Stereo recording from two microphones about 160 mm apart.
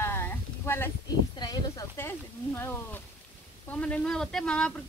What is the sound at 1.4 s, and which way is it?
Speech, 25° left (ahead or behind).